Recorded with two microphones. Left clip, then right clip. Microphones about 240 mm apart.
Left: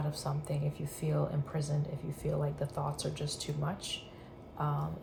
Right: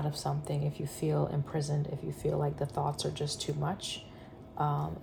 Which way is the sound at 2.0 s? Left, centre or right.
Right.